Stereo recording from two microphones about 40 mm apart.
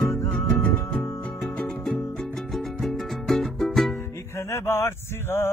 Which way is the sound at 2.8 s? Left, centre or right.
Centre.